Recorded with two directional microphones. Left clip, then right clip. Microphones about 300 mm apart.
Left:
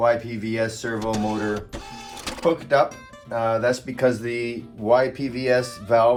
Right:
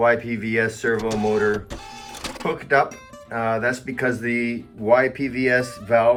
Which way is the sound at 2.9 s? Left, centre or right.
Centre.